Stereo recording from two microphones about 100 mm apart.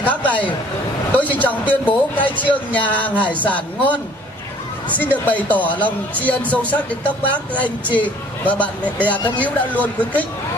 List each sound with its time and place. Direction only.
0.1 s speech: 15° left (ahead or behind)
5.1 s speech: 15° left (ahead or behind)
8.8 s speech: 20° right (ahead or behind)
9.4 s speech: 15° left (ahead or behind)